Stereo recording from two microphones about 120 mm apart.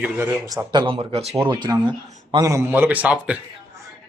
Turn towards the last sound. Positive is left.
turn(degrees=-10)  # may be behind; listen again after turning